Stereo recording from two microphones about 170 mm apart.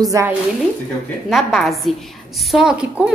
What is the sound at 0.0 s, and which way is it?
Speech, 20° right (ahead or behind).